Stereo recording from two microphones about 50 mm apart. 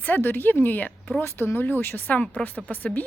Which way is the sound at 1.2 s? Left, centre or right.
Left.